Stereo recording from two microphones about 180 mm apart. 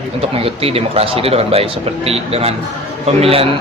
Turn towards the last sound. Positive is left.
turn(degrees=-30)  # may be behind; listen again after turning